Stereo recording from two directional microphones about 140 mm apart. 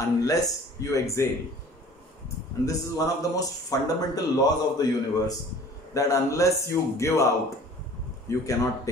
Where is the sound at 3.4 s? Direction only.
25° left (ahead or behind).